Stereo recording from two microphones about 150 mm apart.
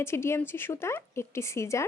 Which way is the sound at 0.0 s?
15° left (ahead or behind).